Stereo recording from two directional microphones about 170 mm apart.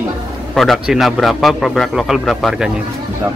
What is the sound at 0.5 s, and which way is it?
Speech, centre (ahead or behind).